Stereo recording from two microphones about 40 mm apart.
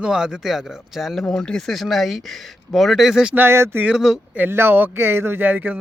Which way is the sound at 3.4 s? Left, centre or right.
Right.